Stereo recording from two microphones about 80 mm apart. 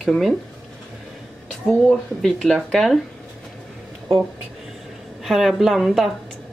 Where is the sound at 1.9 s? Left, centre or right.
Centre.